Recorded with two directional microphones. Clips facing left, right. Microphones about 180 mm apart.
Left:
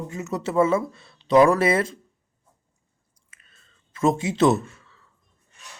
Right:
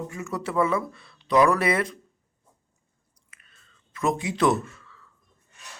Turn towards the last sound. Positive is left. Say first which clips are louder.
# left 2 dB
turn(degrees=25)  # may be behind; listen again after turning